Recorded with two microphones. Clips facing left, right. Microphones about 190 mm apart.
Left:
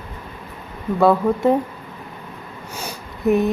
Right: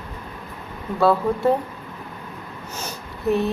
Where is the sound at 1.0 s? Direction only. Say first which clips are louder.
Left 3 dB; 20° left (ahead or behind).